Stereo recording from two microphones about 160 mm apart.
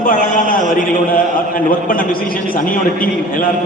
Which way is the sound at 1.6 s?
60° left (ahead or behind).